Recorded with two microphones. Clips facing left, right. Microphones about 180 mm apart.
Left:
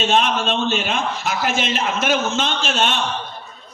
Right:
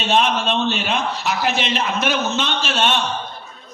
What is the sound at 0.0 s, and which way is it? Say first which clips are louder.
A man's voice: even; 50° left (ahead or behind).